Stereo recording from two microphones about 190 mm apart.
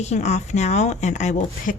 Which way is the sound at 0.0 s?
35° left (ahead or behind).